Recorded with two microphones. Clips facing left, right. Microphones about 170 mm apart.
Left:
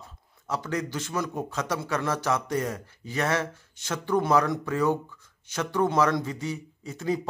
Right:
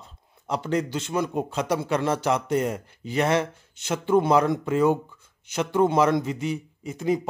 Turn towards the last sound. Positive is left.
turn(degrees=-20)  # may be behind; listen again after turning